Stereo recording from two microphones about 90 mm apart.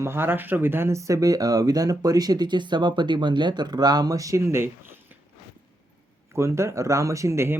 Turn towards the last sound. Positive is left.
turn(degrees=-30)  # may be behind; listen again after turning